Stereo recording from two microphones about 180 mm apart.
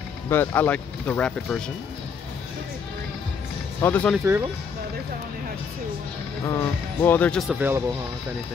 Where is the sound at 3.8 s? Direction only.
10° left (ahead or behind).